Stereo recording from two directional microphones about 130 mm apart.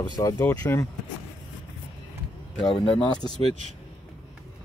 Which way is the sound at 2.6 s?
40° left (ahead or behind).